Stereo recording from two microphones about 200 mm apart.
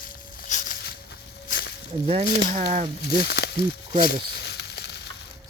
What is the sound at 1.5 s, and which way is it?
Snake, 50° left (ahead or behind).